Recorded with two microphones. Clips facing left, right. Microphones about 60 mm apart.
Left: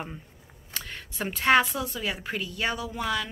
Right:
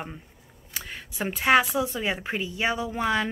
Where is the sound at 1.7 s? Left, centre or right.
Right.